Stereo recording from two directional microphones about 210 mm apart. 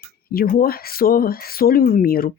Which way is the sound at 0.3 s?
45° left (ahead or behind).